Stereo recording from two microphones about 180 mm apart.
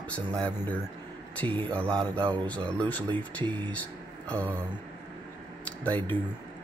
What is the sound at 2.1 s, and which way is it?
Speech, 25° right (ahead or behind).